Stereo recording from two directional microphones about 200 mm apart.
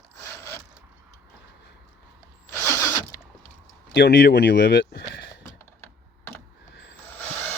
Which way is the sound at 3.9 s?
60° left (ahead or behind).